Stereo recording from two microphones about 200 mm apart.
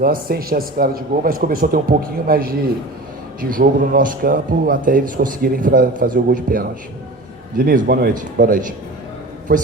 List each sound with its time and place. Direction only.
0.0 s speech: 45° right (ahead or behind)